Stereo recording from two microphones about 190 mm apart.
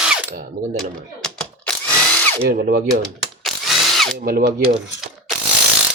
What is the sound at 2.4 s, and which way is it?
Speech, 55° right (ahead or behind).